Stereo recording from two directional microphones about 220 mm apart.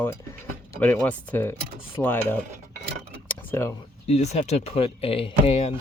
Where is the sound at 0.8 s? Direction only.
5° left (ahead or behind).